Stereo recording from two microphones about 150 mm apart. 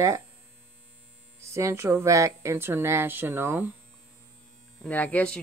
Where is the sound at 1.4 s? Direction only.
20° right (ahead or behind).